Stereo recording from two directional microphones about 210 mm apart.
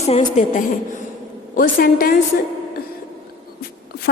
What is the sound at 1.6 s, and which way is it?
Speech, 45° left (ahead or behind).